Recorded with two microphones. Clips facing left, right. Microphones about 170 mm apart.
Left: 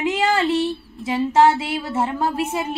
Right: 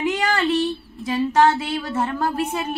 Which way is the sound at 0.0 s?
25° left (ahead or behind).